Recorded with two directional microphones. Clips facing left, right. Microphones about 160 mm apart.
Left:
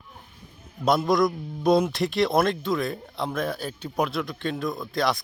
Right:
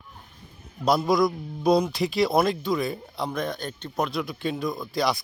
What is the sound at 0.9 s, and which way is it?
A man's voice, centre (ahead or behind).